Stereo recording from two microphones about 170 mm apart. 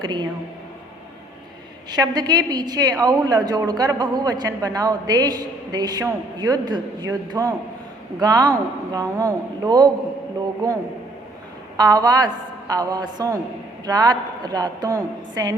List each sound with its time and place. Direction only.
0.0 s a woman's voice: 25° right (ahead or behind)
1.9 s a woman's voice: 25° right (ahead or behind)
11.8 s a woman's voice: 25° right (ahead or behind)